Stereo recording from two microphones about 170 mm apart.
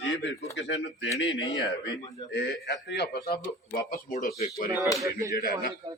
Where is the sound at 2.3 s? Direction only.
80° left.